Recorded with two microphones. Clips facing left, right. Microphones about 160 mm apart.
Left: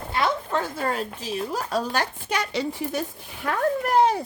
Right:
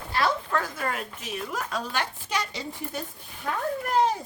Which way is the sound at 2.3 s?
65° left (ahead or behind).